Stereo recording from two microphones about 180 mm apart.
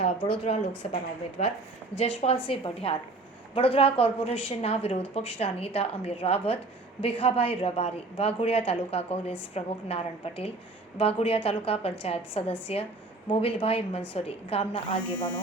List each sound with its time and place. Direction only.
0.0 s a woman's voice: 35° left (ahead or behind)
2.0 s a woman's voice: 30° left (ahead or behind)